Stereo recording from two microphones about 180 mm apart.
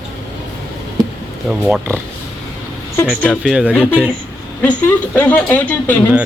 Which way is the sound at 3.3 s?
5° right (ahead or behind).